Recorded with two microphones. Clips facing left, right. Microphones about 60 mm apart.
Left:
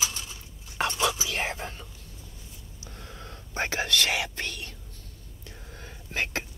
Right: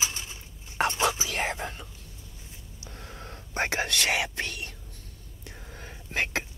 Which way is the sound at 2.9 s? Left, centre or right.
Right.